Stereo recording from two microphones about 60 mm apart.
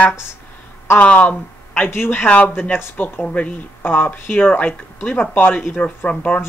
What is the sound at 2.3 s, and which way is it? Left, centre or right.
Speech, left.